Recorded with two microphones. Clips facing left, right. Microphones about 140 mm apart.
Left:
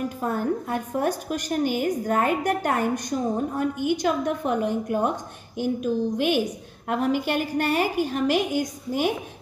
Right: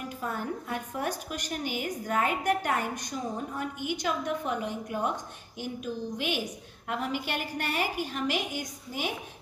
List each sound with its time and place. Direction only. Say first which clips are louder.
0.2 s a woman's voice: left 7 dB; 40° left (ahead or behind)